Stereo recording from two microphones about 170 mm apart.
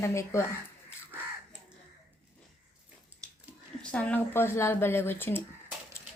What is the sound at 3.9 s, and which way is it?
A woman's voice, 10° left (ahead or behind).